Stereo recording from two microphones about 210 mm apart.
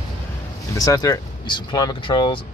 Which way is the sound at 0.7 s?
15° left (ahead or behind).